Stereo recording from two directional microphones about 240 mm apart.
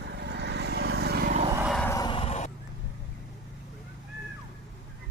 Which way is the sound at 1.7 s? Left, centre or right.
Centre.